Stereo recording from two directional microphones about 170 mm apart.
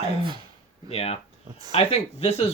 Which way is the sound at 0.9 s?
35° left (ahead or behind).